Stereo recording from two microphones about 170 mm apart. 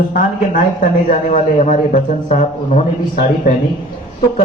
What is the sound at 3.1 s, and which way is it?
Speech, 50° left (ahead or behind).